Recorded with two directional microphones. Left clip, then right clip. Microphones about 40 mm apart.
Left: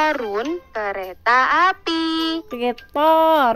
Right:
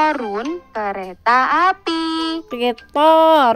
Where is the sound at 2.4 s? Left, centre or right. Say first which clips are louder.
Right 3 dB; right.